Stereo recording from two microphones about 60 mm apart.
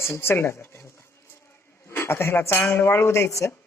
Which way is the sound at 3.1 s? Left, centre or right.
Left.